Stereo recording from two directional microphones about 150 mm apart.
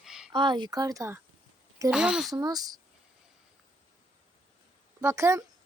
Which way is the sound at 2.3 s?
25° right (ahead or behind).